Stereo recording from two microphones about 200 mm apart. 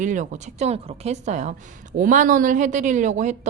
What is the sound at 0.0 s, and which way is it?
A woman's voice, 40° right (ahead or behind).